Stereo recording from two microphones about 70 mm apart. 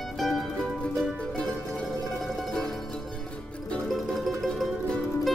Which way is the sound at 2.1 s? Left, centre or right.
Centre.